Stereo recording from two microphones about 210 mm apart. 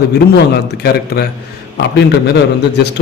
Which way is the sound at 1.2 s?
45° left (ahead or behind).